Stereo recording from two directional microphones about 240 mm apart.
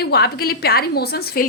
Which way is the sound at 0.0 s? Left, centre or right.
Left.